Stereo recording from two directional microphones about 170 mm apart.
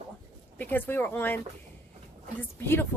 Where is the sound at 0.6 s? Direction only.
10° left (ahead or behind).